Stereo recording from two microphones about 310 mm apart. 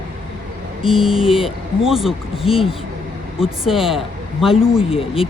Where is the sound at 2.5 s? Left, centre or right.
Centre.